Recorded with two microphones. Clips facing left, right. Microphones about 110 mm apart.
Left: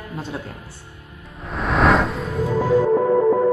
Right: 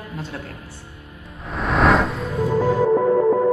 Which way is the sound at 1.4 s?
Centre (ahead or behind).